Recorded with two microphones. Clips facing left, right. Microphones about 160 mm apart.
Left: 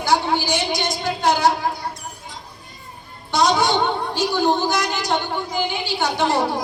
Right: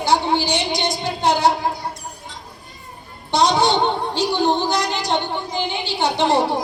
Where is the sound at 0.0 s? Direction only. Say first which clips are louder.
Right 1 dB; 25° right (ahead or behind).